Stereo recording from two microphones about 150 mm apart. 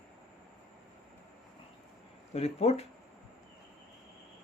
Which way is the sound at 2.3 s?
45° left (ahead or behind).